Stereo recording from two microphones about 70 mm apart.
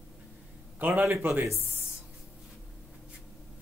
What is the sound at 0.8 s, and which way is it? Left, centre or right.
Speech, right.